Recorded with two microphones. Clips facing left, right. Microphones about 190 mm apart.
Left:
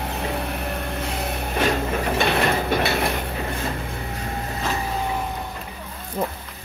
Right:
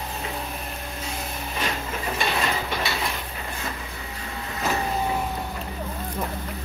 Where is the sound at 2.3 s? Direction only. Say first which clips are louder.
Left 6 dB; 60° left (ahead or behind).